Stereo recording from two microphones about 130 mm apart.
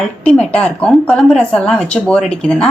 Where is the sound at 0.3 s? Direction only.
10° left (ahead or behind).